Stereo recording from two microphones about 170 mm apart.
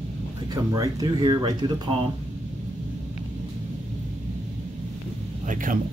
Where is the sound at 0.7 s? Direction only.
20° right (ahead or behind).